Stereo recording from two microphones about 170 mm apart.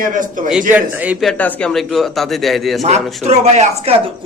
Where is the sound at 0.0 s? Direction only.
50° right (ahead or behind).